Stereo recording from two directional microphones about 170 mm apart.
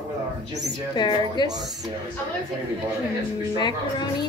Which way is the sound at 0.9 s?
25° left (ahead or behind).